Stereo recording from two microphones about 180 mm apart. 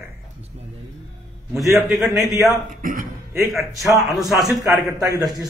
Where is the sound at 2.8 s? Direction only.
50° right (ahead or behind).